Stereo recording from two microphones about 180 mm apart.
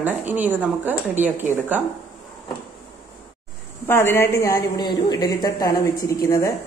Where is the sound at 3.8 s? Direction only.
10° left (ahead or behind).